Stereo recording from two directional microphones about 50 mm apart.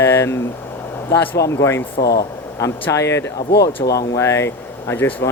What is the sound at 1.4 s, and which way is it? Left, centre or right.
Speech, left.